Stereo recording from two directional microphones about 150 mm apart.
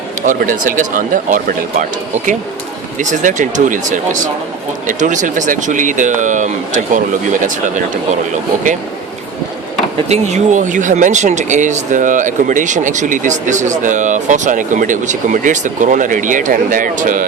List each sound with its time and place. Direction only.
0.3 s speech: 60° right (ahead or behind)
3.0 s speech: 55° right (ahead or behind)
10.1 s speech: 50° right (ahead or behind)